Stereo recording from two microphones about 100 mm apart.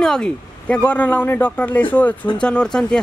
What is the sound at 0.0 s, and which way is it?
Speech, 5° left (ahead or behind).